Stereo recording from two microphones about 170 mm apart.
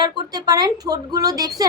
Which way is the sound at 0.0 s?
25° right (ahead or behind).